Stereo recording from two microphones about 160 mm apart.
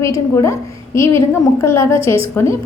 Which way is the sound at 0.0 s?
20° left (ahead or behind).